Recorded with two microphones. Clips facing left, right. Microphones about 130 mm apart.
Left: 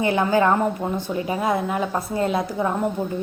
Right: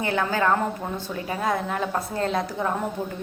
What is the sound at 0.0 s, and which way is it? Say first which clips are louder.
A woman's voice: left 5 dB; 15° left (ahead or behind).